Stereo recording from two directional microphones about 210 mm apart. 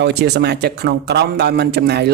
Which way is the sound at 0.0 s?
50° right (ahead or behind).